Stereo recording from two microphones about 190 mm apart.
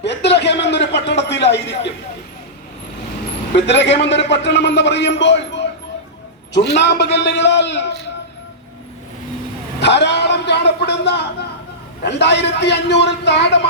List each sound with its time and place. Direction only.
0.0 s a sound: 65° left (ahead or behind)
3.5 s a man's voice: 65° left (ahead or behind)
6.7 s a man's voice: 65° left (ahead or behind)
9.8 s a man's voice: 65° left (ahead or behind)